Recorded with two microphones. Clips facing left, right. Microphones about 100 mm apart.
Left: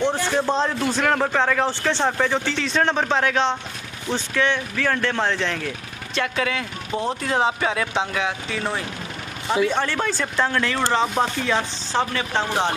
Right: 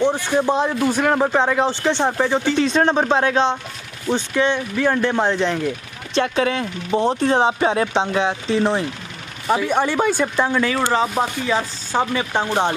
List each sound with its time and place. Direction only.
0.0 s speech: 15° right (ahead or behind)
6.1 s speech: 30° right (ahead or behind)
9.7 s speech: 15° right (ahead or behind)